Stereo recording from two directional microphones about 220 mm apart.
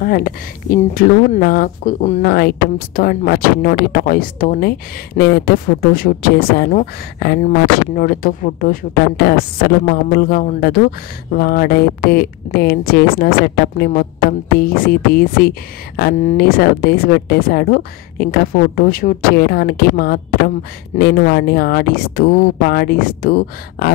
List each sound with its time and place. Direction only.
0.0 s speech: 40° left (ahead or behind)